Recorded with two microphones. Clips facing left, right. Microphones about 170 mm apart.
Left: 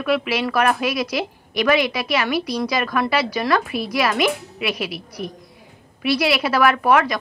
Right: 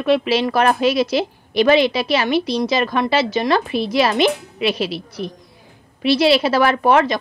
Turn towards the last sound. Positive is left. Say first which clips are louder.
# right 2 dB
turn(degrees=-25)  # may be behind; listen again after turning